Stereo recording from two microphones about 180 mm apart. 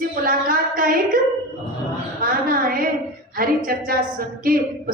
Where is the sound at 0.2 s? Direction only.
50° right (ahead or behind).